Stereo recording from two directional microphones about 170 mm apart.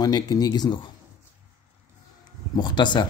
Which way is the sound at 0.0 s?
20° left (ahead or behind).